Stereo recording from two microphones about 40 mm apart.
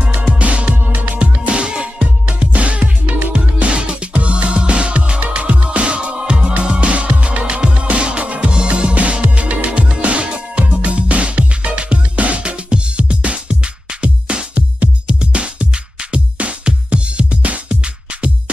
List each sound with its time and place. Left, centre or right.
0.4 s music: right
2.2 s music: right